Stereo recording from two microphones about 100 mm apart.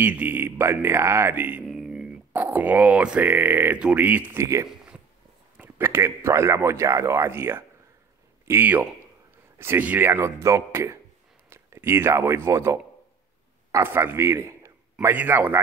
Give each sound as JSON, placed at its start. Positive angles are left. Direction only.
{"t": 0.0, "sound": "a man's voice", "side_deg": -15}
{"t": 1.7, "sound": "a sound", "side_deg": -5}
{"t": 2.3, "sound": "speech", "side_deg": -15}
{"t": 4.3, "sound": "a man's voice", "side_deg": -30}
{"t": 4.6, "sound": "a sound", "side_deg": -10}
{"t": 5.6, "sound": "a man's voice", "side_deg": -25}
{"t": 15.1, "sound": "a man's voice", "side_deg": -15}